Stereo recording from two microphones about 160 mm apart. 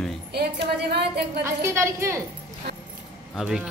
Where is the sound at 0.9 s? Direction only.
85° right.